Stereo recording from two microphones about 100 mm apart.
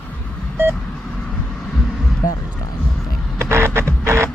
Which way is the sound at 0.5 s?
20° right (ahead or behind).